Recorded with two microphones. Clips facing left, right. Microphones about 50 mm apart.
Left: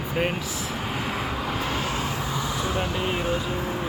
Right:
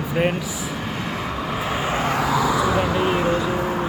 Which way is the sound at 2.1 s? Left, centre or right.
Right.